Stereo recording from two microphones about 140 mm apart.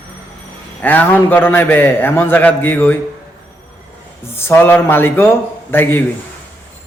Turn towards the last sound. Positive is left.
turn(degrees=15)  # may be behind; listen again after turning